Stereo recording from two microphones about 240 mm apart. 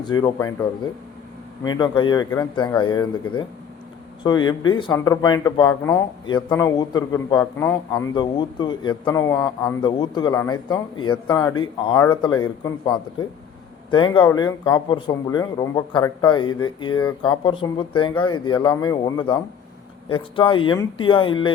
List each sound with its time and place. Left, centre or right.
0.2 s a man's voice: centre